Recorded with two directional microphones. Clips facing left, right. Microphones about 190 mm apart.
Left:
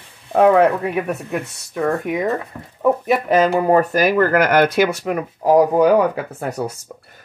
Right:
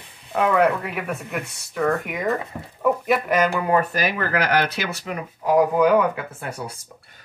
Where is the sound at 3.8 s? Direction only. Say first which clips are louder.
Left 8 dB; 45° left (ahead or behind).